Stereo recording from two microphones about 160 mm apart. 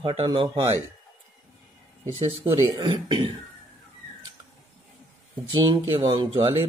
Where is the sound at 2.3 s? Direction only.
30° right (ahead or behind).